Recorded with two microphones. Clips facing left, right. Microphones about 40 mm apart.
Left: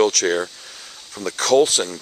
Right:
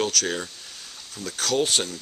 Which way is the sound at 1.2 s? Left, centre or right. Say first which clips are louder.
Left 7 dB; left.